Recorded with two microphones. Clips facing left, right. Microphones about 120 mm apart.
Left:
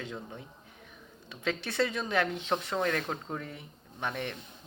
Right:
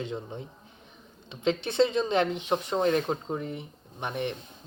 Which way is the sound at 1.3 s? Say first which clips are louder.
Right 6 dB; 20° right (ahead or behind).